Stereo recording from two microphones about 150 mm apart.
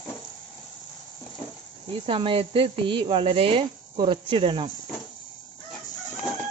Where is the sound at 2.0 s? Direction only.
35° right (ahead or behind).